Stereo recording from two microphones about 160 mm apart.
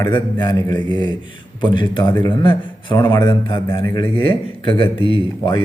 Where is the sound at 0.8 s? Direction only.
30° right (ahead or behind).